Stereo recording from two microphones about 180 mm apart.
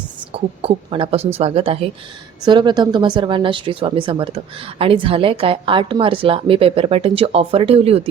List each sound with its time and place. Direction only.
0.3 s a woman's voice: 30° right (ahead or behind)